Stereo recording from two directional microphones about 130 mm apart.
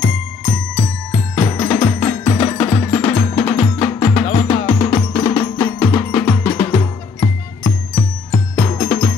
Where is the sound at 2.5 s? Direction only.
50° left (ahead or behind).